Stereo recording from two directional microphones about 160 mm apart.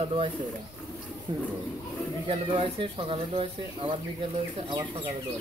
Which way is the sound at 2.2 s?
35° right (ahead or behind).